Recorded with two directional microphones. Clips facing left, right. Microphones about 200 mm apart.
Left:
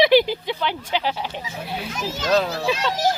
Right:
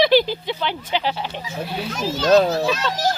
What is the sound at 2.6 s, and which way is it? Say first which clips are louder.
Speech: even; 15° left (ahead or behind).